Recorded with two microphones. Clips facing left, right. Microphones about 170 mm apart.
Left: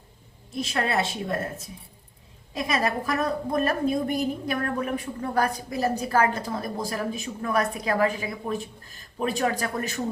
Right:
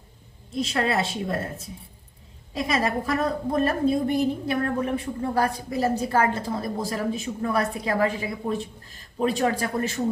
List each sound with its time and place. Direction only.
0.5 s a woman's voice: 35° right (ahead or behind)
2.6 s a woman's voice: 30° right (ahead or behind)